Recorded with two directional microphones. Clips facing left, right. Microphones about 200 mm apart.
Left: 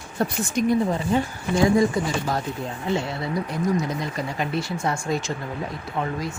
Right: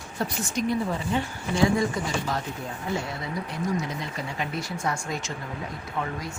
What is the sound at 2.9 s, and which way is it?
Speech, 25° left (ahead or behind).